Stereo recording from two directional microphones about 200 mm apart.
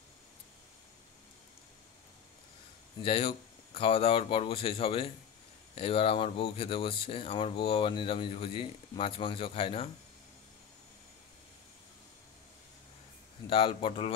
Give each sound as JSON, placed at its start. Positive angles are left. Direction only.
{"t": 3.0, "sound": "speech", "side_deg": 25}
{"t": 13.5, "sound": "speech", "side_deg": 25}